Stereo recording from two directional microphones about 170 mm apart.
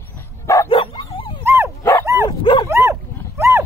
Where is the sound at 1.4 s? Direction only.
15° right (ahead or behind).